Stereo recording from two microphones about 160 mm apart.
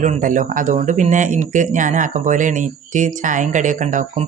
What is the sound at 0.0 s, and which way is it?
Speech, 55° right (ahead or behind).